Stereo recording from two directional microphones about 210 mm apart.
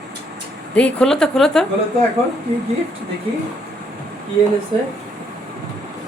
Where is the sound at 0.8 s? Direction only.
5° left (ahead or behind).